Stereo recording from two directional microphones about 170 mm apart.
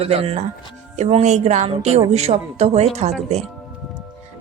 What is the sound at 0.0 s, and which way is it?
A woman's voice, 35° right (ahead or behind).